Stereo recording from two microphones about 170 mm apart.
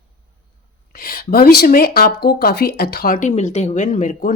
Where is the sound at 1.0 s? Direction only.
60° left (ahead or behind).